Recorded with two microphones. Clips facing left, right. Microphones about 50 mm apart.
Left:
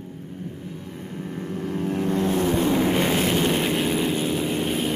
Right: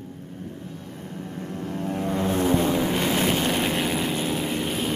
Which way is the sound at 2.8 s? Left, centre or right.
Left.